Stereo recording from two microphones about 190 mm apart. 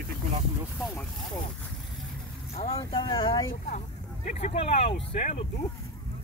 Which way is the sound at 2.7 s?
20° left (ahead or behind).